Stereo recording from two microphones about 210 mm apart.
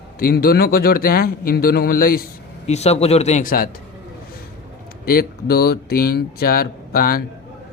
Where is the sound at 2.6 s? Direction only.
30° left (ahead or behind).